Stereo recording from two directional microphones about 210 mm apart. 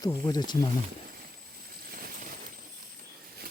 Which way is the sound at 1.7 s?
45° right (ahead or behind).